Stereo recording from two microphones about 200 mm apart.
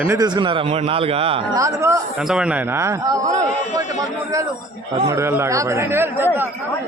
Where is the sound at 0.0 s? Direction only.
15° right (ahead or behind).